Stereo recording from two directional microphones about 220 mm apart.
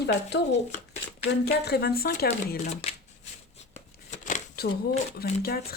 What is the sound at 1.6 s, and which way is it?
Speech, 45° left (ahead or behind).